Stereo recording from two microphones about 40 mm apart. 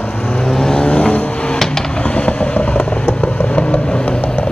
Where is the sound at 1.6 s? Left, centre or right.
Centre.